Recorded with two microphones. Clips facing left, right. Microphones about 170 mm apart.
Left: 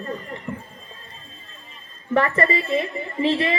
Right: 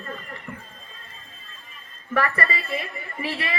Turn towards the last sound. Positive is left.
turn(degrees=20)  # may be behind; listen again after turning